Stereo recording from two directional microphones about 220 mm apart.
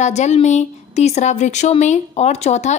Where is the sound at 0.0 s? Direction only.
30° left (ahead or behind).